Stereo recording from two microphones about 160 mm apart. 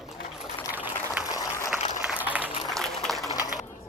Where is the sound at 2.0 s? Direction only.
10° right (ahead or behind).